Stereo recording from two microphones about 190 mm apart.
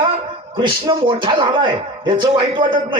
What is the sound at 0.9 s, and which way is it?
Speech, 25° right (ahead or behind).